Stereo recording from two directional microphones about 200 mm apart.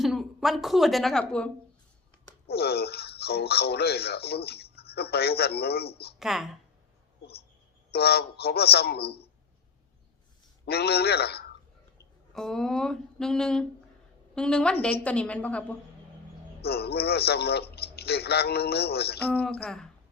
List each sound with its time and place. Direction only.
0.0 s speech: centre (ahead or behind)
2.5 s speech: 55° left (ahead or behind)
6.1 s speech: centre (ahead or behind)
7.9 s speech: 55° left (ahead or behind)
10.7 s speech: 55° left (ahead or behind)
12.3 s a woman's voice: centre (ahead or behind)
16.6 s speech: 50° left (ahead or behind)
19.4 s a woman's voice: 5° left (ahead or behind)